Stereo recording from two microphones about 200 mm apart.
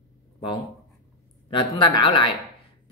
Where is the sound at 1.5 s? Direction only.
25° left (ahead or behind).